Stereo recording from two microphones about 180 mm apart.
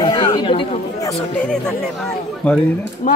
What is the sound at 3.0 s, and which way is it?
Speech, 45° left (ahead or behind).